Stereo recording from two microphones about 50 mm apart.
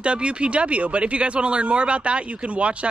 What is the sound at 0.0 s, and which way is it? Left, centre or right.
Speech, right.